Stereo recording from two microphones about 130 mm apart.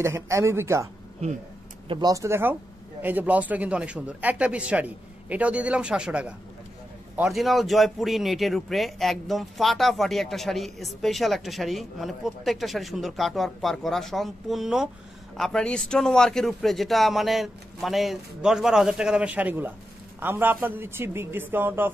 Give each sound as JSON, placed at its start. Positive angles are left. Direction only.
{"t": 0.0, "sound": "speech", "side_deg": -20}
{"t": 1.9, "sound": "a man's voice", "side_deg": -30}